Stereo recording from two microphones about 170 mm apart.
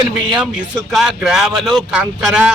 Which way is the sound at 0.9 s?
5° right (ahead or behind).